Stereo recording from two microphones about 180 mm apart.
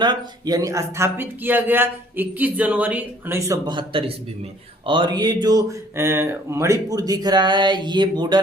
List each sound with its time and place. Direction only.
0.0 s speech: 25° right (ahead or behind)